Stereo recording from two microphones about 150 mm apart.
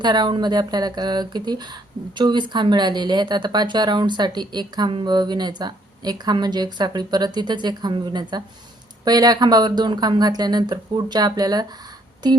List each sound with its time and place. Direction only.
0.0 s speech: 30° right (ahead or behind)